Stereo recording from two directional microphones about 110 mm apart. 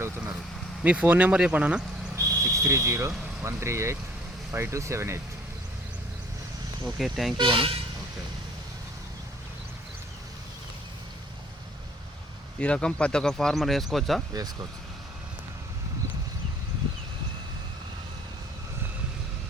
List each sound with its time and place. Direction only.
0.8 s speech: 10° right (ahead or behind)
2.1 s a sound: 25° right (ahead or behind)
3.4 s speech: 25° right (ahead or behind)
6.8 s speech: centre (ahead or behind)
7.3 s speech: 45° right (ahead or behind)
12.5 s speech: 10° left (ahead or behind)
14.3 s speech: 35° right (ahead or behind)